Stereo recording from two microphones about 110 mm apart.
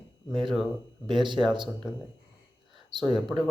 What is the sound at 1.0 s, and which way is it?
Speech, 45° right (ahead or behind).